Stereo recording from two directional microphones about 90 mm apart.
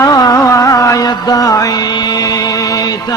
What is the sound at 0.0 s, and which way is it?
Music, 45° left (ahead or behind).